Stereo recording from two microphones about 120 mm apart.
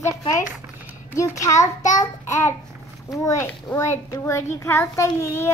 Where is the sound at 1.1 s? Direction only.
25° left (ahead or behind).